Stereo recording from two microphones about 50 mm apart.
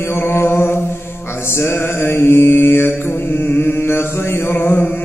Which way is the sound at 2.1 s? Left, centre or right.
Left.